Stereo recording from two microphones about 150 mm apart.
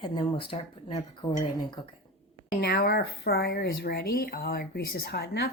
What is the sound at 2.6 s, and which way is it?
Speech, 90° left.